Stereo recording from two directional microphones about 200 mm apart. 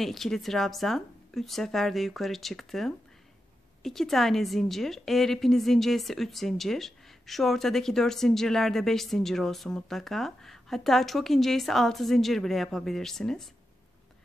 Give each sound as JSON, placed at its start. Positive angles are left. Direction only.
{"t": 0.0, "sound": "a woman's voice", "side_deg": 0}